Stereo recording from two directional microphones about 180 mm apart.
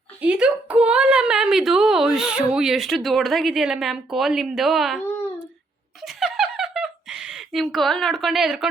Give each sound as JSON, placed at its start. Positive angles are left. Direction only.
{"t": 0.2, "sound": "a woman's voice", "side_deg": -5}
{"t": 6.0, "sound": "giggle", "side_deg": 0}